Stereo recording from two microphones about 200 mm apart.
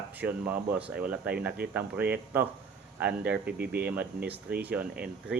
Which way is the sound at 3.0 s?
5° right (ahead or behind).